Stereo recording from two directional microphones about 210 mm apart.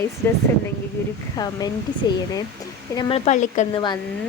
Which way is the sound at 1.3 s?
20° left (ahead or behind).